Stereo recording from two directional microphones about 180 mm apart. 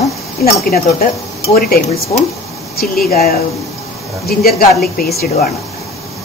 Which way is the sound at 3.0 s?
55° left (ahead or behind).